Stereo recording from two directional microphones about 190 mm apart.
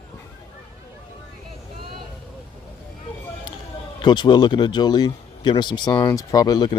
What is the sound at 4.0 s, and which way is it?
Speech, 25° left (ahead or behind).